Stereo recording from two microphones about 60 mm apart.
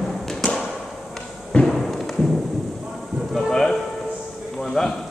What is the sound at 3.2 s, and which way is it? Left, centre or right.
Music, centre.